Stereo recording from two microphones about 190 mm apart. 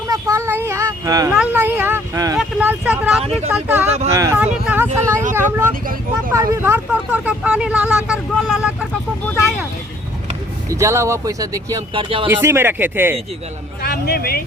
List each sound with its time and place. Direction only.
0.1 s a sound: 15° right (ahead or behind)
2.4 s vehicle: 5° right (ahead or behind)
3.5 s speech: 10° right (ahead or behind)
4.6 s a sound: 10° right (ahead or behind)
5.3 s vehicle: 10° right (ahead or behind)
5.8 s vehicle: 50° right (ahead or behind)
6.3 s speech: 15° right (ahead or behind)
10.7 s speech: 15° right (ahead or behind)
12.3 s speech: 15° right (ahead or behind)
13.8 s a man's voice: 55° left (ahead or behind)